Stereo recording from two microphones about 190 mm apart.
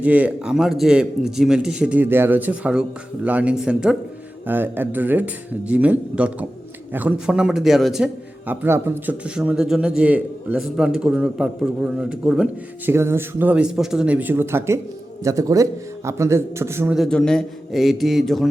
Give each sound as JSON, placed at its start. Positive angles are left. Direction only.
{"t": 0.0, "sound": "a man's voice", "side_deg": -5}
{"t": 17.0, "sound": "a man's voice", "side_deg": 5}